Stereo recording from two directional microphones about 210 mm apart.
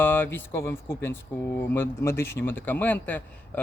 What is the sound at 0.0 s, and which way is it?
Speech, 10° left (ahead or behind).